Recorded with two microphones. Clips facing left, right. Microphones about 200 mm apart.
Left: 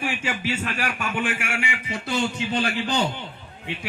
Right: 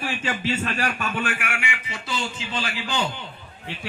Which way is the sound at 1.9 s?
55° left (ahead or behind).